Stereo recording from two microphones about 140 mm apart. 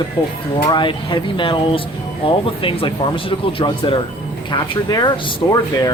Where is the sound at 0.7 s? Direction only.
35° left (ahead or behind).